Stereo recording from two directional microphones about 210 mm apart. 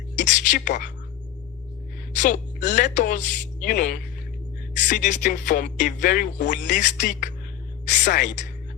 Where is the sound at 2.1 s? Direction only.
35° left (ahead or behind).